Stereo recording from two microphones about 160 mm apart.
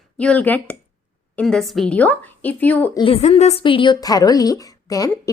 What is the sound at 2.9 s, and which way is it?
Speech, 35° left (ahead or behind).